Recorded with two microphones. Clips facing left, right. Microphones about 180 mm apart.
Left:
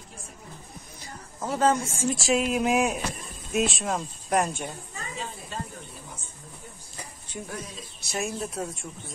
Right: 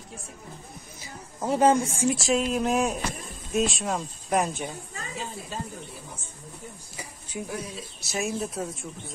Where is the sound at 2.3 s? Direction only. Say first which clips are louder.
Left 3 dB; 5° left (ahead or behind).